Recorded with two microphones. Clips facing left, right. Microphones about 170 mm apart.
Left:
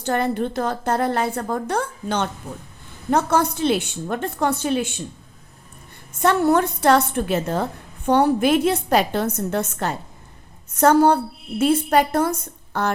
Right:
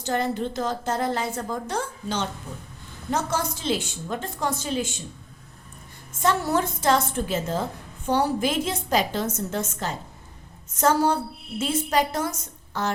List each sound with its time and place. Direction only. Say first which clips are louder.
0.0 s a woman's voice: left 4 dB; 60° left (ahead or behind)
6.1 s a woman's voice: left 6 dB; 60° left (ahead or behind)